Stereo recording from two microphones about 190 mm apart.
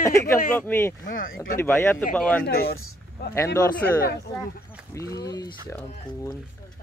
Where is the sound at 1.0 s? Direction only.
45° left (ahead or behind).